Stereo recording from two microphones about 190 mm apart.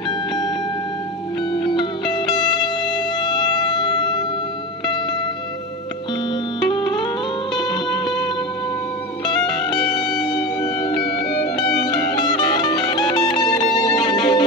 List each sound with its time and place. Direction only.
1.5 s music: 25° left (ahead or behind)
6.6 s music: 25° left (ahead or behind)
9.2 s music: 20° left (ahead or behind)
10.8 s music: 55° left (ahead or behind)
11.9 s music: 20° left (ahead or behind)